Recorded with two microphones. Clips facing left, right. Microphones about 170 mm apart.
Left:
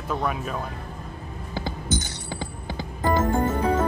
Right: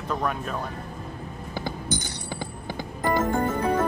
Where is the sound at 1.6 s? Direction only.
15° right (ahead or behind).